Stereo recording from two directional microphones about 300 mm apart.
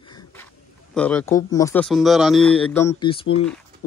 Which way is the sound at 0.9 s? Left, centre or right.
Centre.